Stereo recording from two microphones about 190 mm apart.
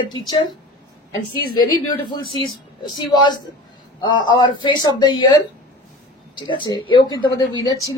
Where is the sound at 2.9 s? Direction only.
25° left (ahead or behind).